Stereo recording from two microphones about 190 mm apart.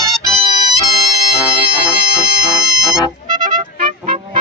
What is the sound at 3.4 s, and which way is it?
Music, 45° right (ahead or behind).